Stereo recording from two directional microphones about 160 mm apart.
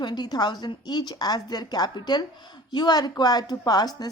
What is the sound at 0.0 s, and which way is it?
Speech, 25° left (ahead or behind).